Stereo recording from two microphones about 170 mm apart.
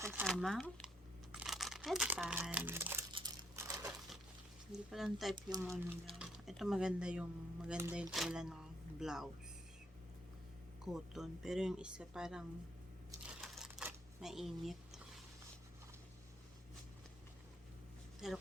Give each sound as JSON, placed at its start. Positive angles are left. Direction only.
{"t": 0.0, "sound": "shuffling cards", "side_deg": -10}
{"t": 0.3, "sound": "speech", "side_deg": 0}
{"t": 3.1, "sound": "crumpling", "side_deg": -25}
{"t": 3.5, "sound": "crumpling", "side_deg": -15}
{"t": 4.7, "sound": "speech", "side_deg": 0}
{"t": 8.1, "sound": "speech", "side_deg": -5}
{"t": 10.8, "sound": "speech", "side_deg": 0}
{"t": 13.2, "sound": "camera", "side_deg": 0}
{"t": 18.2, "sound": "speech", "side_deg": 0}